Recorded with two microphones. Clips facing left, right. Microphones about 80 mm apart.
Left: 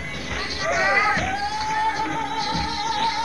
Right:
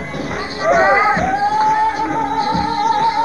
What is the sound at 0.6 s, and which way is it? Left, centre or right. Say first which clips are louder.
Music: right 9 dB; right.